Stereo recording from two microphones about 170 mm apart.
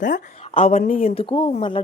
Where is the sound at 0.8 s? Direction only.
35° left (ahead or behind).